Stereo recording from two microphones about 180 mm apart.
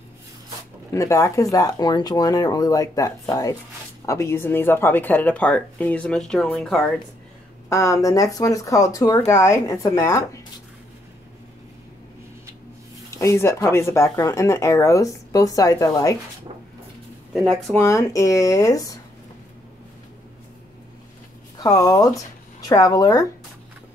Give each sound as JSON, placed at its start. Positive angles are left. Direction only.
{"t": 0.9, "sound": "speech", "side_deg": 15}
{"t": 7.7, "sound": "speech", "side_deg": 15}
{"t": 13.1, "sound": "speech", "side_deg": 15}
{"t": 17.7, "sound": "speech", "side_deg": 15}
{"t": 21.5, "sound": "speech", "side_deg": 20}